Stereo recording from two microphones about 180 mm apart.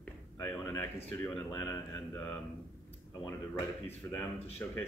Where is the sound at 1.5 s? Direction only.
15° left (ahead or behind).